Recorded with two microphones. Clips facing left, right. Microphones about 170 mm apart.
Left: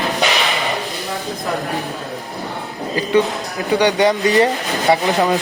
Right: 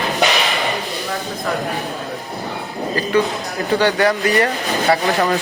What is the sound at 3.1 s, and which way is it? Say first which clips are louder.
Speech: left 3 dB; 20° left (ahead or behind).